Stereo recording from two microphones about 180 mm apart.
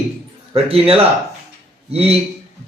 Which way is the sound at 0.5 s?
35° right (ahead or behind).